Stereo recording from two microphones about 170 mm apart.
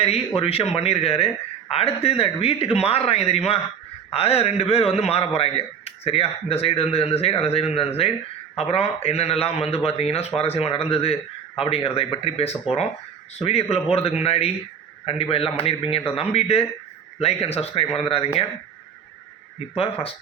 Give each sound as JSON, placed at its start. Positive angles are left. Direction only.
{"t": 0.3, "sound": "a man's voice", "side_deg": 35}
{"t": 19.7, "sound": "a man's voice", "side_deg": 35}